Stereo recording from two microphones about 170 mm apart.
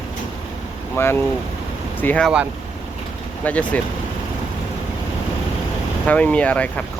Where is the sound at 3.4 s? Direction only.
10° left (ahead or behind).